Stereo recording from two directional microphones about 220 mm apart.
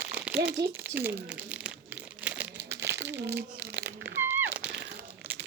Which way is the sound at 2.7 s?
50° right (ahead or behind).